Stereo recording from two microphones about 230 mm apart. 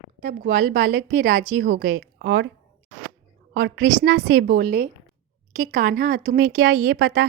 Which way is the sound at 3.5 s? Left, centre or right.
Right.